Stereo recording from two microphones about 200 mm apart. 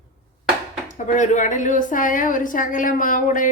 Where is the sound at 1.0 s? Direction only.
40° left (ahead or behind).